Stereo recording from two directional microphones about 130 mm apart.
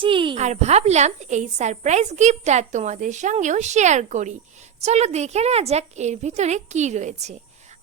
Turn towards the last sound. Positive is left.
turn(degrees=-60)  # may be behind; listen again after turning